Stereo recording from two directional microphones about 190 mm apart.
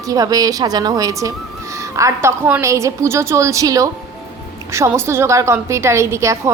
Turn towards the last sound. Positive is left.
turn(degrees=-15)  # may be behind; listen again after turning